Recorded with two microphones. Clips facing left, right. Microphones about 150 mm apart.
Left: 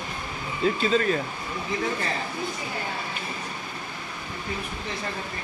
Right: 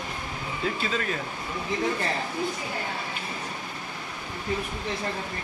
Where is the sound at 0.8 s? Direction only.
30° left (ahead or behind).